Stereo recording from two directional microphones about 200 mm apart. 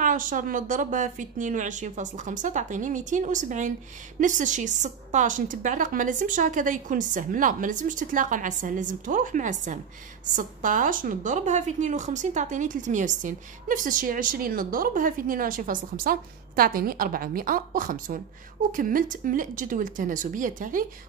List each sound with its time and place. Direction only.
0.0 s a woman's voice: 40° right (ahead or behind)